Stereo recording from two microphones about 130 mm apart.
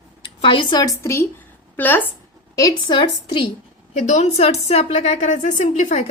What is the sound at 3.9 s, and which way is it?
A woman's voice, 65° left (ahead or behind).